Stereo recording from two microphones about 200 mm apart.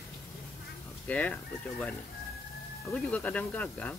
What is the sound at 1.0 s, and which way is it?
Speech, 5° left (ahead or behind).